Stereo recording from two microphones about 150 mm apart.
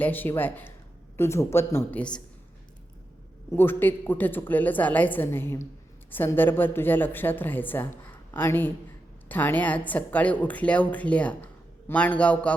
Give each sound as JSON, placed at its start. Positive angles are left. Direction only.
{"t": 0.0, "sound": "speech", "side_deg": 10}
{"t": 3.5, "sound": "speech", "side_deg": 15}